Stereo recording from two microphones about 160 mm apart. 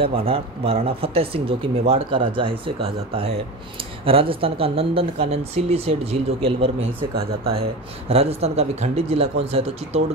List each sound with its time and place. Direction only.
0.0 s speech: 35° right (ahead or behind)
8.1 s speech: 40° right (ahead or behind)